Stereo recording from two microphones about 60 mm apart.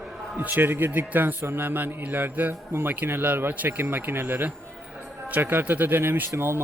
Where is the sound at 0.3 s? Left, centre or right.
Right.